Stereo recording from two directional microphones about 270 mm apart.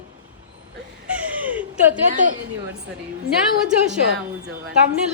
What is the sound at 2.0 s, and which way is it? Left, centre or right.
Speech, right.